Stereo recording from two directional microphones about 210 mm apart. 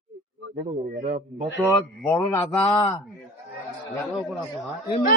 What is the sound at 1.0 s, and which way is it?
Speech, 35° right (ahead or behind).